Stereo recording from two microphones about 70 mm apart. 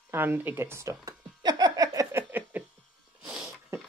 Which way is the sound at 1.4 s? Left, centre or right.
Right.